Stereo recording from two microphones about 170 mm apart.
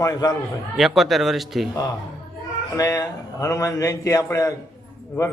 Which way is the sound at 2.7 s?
20° left (ahead or behind).